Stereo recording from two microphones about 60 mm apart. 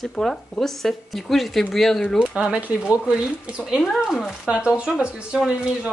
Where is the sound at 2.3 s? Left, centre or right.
Centre.